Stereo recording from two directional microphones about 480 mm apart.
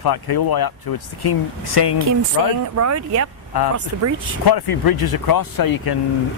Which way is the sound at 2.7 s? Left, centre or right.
Right.